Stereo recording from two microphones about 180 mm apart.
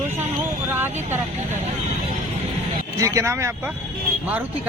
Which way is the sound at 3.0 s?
15° right (ahead or behind).